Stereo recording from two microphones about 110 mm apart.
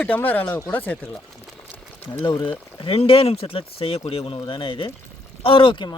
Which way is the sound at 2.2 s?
50° left (ahead or behind).